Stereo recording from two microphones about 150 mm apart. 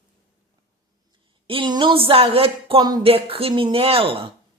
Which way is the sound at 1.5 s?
35° right (ahead or behind).